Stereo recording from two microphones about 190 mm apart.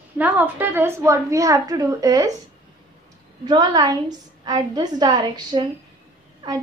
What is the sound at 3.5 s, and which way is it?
A woman's voice, 20° right (ahead or behind).